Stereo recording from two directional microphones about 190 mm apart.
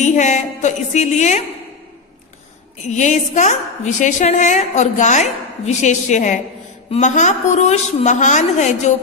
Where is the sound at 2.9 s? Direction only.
40° left (ahead or behind).